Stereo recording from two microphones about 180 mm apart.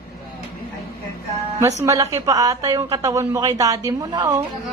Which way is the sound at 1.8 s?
20° right (ahead or behind).